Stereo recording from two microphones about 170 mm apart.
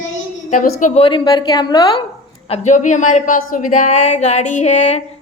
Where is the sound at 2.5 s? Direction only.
45° left (ahead or behind).